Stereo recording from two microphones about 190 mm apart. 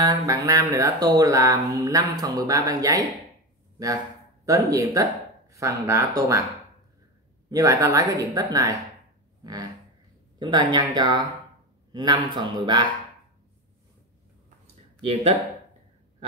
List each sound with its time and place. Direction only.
0.0 s music: 20° right (ahead or behind)
4.5 s music: 15° right (ahead or behind)
7.5 s music: 15° right (ahead or behind)
9.4 s a sound: 20° right (ahead or behind)
10.4 s a man's voice: 25° right (ahead or behind)
15.0 s speech: 30° right (ahead or behind)